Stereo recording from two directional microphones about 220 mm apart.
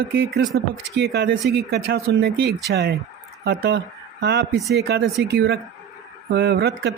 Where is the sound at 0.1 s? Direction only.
45° right (ahead or behind).